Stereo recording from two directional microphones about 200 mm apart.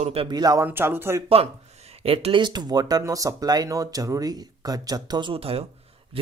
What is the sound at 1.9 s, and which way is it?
Speech, 30° right (ahead or behind).